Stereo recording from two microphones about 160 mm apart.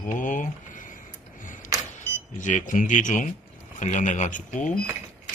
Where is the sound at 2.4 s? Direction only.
55° left (ahead or behind).